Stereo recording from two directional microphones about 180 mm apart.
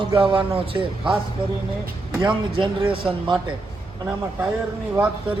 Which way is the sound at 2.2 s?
30° right (ahead or behind).